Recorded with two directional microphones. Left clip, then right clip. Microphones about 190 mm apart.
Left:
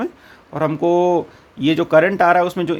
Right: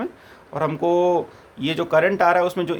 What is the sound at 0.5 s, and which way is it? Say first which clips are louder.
Speech: left 3 dB; 20° left (ahead or behind).